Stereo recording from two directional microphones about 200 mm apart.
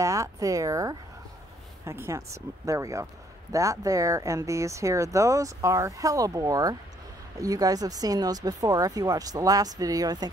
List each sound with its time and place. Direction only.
0.0 s speech: 15° right (ahead or behind)